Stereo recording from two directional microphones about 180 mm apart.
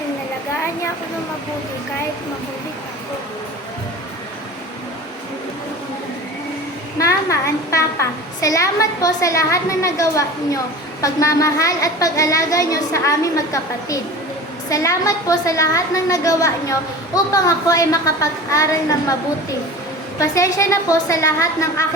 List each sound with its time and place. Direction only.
7.0 s a woman's voice: 15° left (ahead or behind)